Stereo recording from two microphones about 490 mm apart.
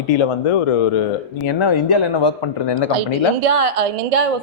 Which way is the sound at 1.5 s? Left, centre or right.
Left.